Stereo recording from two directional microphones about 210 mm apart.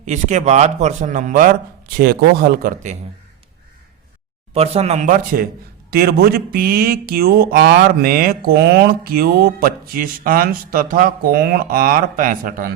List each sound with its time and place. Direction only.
0.0 s a man's voice: 35° right (ahead or behind)
4.5 s a man's voice: 30° right (ahead or behind)